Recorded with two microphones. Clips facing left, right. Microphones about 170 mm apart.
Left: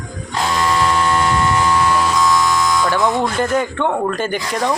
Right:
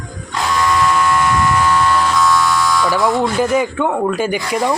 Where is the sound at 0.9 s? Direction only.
30° left (ahead or behind).